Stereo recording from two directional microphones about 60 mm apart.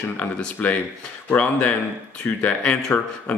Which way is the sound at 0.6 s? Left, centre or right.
Centre.